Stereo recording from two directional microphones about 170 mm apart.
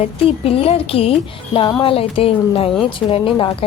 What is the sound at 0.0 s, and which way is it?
A woman's voice, 35° left (ahead or behind).